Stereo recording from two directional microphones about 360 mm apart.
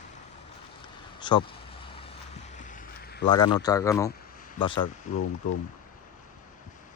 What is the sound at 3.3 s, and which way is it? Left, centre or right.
Speech, centre.